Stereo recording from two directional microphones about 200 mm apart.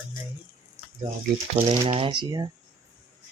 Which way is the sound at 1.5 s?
30° right (ahead or behind).